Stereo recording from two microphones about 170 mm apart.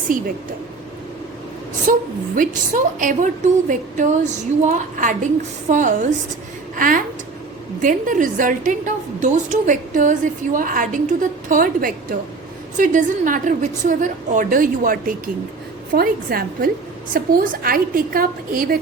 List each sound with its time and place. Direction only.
1.9 s a woman's voice: 55° right (ahead or behind)